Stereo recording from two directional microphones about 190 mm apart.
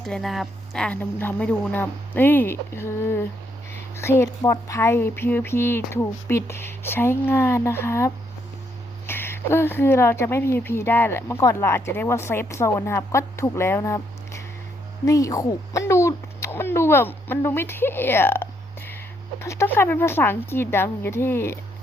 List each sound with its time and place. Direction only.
0.0 s speech: centre (ahead or behind)